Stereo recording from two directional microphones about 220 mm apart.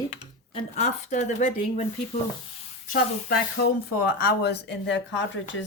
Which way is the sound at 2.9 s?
45° left (ahead or behind).